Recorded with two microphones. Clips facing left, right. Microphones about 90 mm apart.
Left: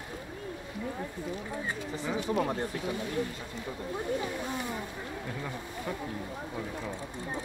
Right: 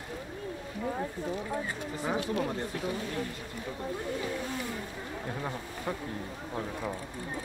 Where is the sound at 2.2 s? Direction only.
30° left (ahead or behind).